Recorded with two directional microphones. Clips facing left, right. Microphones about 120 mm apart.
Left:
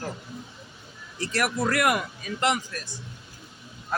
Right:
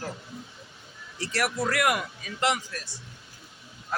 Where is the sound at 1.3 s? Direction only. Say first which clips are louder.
Left 2 dB; 45° left (ahead or behind).